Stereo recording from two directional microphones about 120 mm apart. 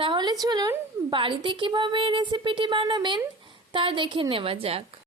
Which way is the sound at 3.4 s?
45° right (ahead or behind).